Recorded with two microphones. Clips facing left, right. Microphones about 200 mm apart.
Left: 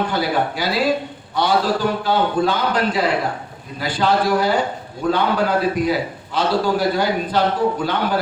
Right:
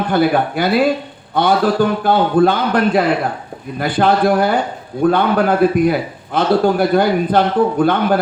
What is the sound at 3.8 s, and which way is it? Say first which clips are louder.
Speech: right 4 dB; 55° right (ahead or behind).